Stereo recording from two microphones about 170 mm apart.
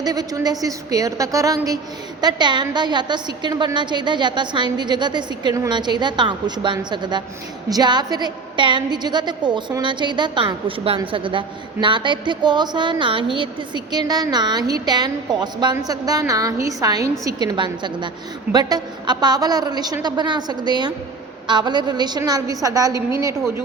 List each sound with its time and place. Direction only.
0.0 s a woman's voice: 20° right (ahead or behind)